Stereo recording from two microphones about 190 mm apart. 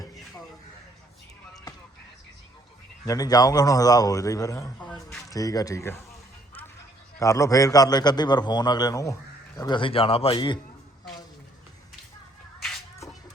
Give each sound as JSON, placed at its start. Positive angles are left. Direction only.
{"t": 3.1, "sound": "a man's voice", "side_deg": 20}
{"t": 7.2, "sound": "a man's voice", "side_deg": 15}
{"t": 12.5, "sound": "music", "side_deg": 0}